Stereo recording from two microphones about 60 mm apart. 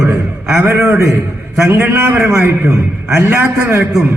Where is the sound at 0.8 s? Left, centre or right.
Right.